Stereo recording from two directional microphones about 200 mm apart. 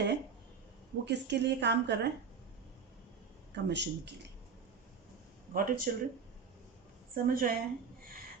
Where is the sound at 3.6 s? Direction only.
60° right (ahead or behind).